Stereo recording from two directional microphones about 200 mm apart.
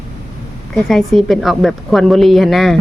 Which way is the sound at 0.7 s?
Centre (ahead or behind).